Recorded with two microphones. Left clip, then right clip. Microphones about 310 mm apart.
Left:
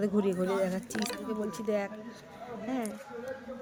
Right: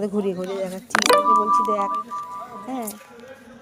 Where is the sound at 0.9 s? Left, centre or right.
Right.